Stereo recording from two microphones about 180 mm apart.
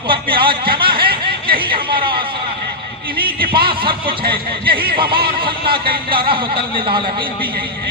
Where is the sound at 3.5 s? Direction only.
30° right (ahead or behind).